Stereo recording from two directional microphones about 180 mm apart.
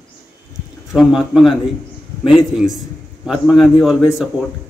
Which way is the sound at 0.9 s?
Centre (ahead or behind).